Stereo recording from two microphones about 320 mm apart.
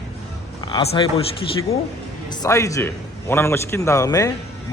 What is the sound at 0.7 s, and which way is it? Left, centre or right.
Speech, centre.